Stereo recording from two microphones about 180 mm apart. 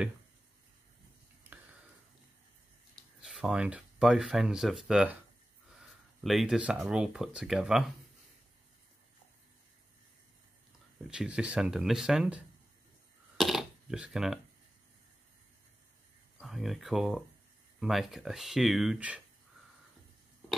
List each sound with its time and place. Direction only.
3.0 s speech: centre (ahead or behind)
6.2 s speech: centre (ahead or behind)
11.1 s speech: 5° right (ahead or behind)
13.4 s a sound: centre (ahead or behind)
16.3 s speech: centre (ahead or behind)